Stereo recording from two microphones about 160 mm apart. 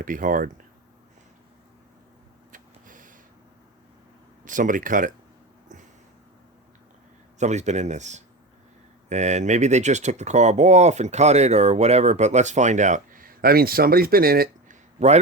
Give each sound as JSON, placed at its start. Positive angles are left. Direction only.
{"t": 0.0, "sound": "speech", "side_deg": -55}
{"t": 2.5, "sound": "a sound", "side_deg": -55}
{"t": 4.4, "sound": "speech", "side_deg": -55}
{"t": 7.3, "sound": "speech", "side_deg": -45}
{"t": 14.9, "sound": "a man's voice", "side_deg": -45}